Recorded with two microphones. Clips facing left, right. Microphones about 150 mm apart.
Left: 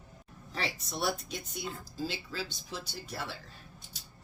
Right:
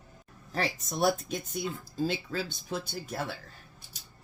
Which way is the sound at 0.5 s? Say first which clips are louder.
Right 5 dB; 45° right (ahead or behind).